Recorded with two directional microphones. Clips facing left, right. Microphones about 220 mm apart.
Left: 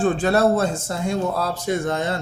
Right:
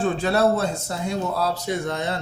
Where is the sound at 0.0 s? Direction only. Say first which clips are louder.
Left 2 dB; 50° left (ahead or behind).